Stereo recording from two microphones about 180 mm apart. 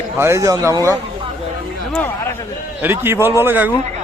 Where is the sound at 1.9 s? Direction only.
10° left (ahead or behind).